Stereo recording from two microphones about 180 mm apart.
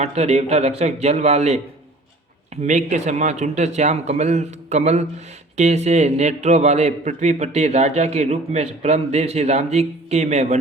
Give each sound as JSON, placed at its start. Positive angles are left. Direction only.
{"t": 0.0, "sound": "speech", "side_deg": -35}
{"t": 2.6, "sound": "speech", "side_deg": -40}